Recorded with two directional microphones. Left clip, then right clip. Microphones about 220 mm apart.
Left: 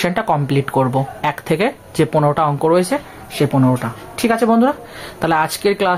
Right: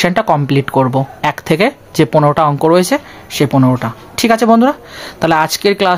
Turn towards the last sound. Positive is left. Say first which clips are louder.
# right 4 dB
turn(degrees=-35)  # may be behind; listen again after turning